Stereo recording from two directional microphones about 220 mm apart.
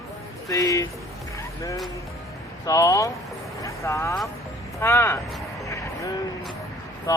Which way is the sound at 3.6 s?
15° left (ahead or behind).